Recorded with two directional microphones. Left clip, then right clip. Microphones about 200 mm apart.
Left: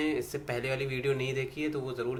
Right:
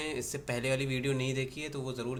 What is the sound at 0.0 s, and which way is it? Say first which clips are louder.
Speech: left 5 dB; 30° right (ahead or behind).